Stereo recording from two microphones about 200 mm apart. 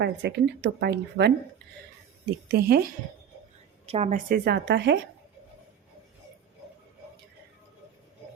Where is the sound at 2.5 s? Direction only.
50° right (ahead or behind).